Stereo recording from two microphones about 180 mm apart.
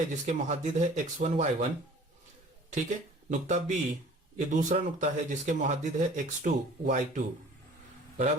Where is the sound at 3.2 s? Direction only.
40° right (ahead or behind).